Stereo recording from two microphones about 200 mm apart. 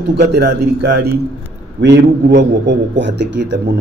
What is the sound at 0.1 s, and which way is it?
A man's voice, 55° right (ahead or behind).